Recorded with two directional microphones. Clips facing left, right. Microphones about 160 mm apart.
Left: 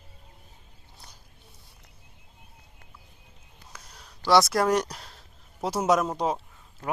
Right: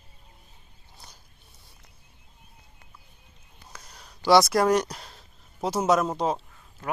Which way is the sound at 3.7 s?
Centre (ahead or behind).